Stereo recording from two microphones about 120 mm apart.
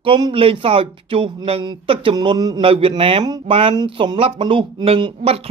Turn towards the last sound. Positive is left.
turn(degrees=-55)  # may be behind; listen again after turning